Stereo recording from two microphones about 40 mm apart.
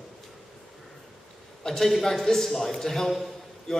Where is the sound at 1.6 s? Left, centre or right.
Centre.